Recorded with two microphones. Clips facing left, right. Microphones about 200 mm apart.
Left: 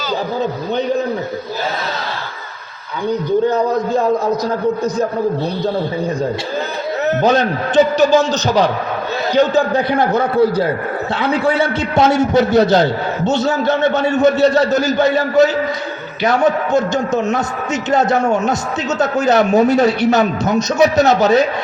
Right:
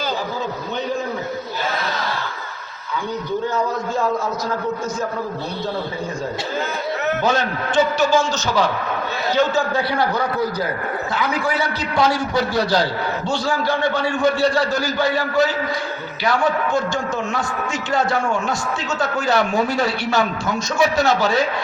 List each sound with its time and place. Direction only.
3.5 s a man's voice: 40° left (ahead or behind)
7.3 s a man's voice: 20° left (ahead or behind)
18.2 s a man's voice: 40° left (ahead or behind)
19.2 s a man's voice: 20° left (ahead or behind)